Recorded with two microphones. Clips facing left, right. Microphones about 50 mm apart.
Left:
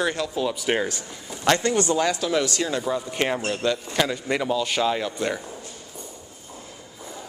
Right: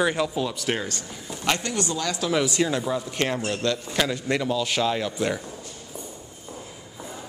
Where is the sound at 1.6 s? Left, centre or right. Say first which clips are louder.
Left 6 dB; left.